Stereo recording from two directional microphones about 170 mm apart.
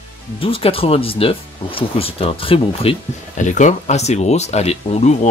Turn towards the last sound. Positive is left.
turn(degrees=40)  # may be behind; listen again after turning